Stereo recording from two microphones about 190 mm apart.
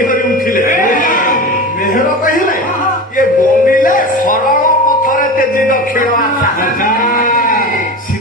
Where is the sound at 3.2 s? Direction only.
45° left (ahead or behind).